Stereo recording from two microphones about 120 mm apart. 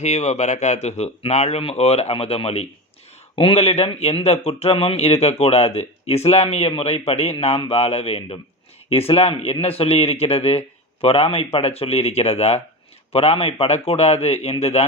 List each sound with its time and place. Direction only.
0.0 s speech: 70° left (ahead or behind)